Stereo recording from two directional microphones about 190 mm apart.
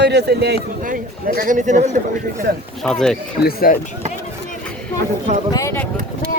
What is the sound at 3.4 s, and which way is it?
Speech, 50° left (ahead or behind).